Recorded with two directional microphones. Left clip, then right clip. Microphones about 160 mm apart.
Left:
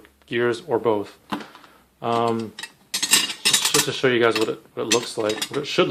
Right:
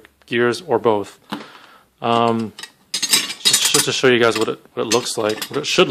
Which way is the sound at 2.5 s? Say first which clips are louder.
Right 3 dB; 5° right (ahead or behind).